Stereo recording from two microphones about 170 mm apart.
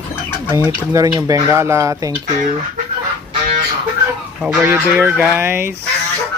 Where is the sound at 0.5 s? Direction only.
20° right (ahead or behind).